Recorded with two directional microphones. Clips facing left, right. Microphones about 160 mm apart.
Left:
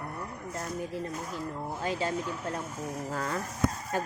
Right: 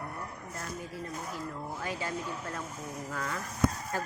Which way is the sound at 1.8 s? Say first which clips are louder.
Left 6 dB; 25° left (ahead or behind).